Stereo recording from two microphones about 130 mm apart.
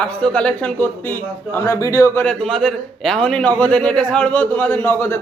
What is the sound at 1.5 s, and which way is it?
Speech, 25° left (ahead or behind).